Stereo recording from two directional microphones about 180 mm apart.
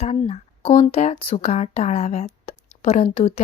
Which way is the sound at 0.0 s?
35° left (ahead or behind).